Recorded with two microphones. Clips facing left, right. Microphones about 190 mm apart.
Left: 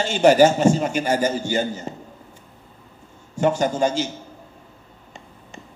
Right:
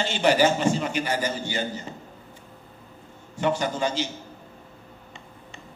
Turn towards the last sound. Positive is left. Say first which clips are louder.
# left 6 dB
turn(degrees=45)  # may be behind; listen again after turning